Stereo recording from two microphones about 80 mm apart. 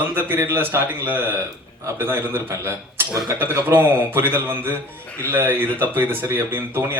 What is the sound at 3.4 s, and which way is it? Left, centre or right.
A man's voice, right.